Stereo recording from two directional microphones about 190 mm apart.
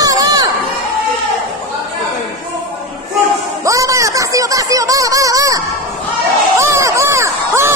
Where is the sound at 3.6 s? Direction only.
15° right (ahead or behind).